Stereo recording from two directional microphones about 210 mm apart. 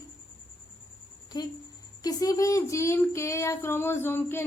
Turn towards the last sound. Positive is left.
turn(degrees=10)  # may be behind; listen again after turning